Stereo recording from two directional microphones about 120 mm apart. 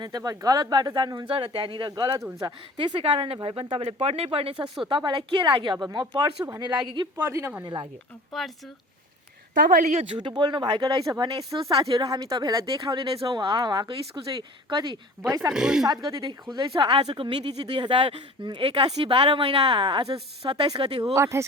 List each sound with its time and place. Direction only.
0.0 s speech: 35° right (ahead or behind); by 4.5 s 50° right (ahead or behind)
4.9 s speech: 40° right (ahead or behind)
7.2 s speech: 25° right (ahead or behind)
7.6 s speech: 35° right (ahead or behind)
8.3 s speech: centre (ahead or behind)
9.6 s a woman's voice: 90° right
10.1 s speech: 40° right (ahead or behind)
15.5 s speech: 5° right (ahead or behind)
15.9 s speech: 35° right (ahead or behind)
21.2 s speech: 25° right (ahead or behind)